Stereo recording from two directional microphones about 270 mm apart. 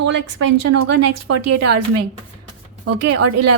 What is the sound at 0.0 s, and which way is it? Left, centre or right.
Speech, right.